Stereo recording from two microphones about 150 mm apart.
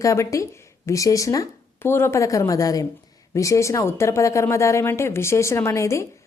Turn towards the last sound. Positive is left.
turn(degrees=20)  # may be behind; listen again after turning